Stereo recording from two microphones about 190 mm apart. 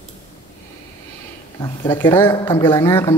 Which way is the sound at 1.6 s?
25° left (ahead or behind).